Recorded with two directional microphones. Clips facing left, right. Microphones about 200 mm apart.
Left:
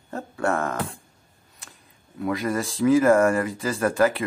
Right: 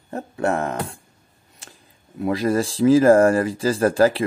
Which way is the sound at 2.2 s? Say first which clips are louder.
Right 5 dB; 30° right (ahead or behind).